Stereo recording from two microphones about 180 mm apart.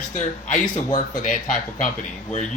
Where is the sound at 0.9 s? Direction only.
45° left (ahead or behind).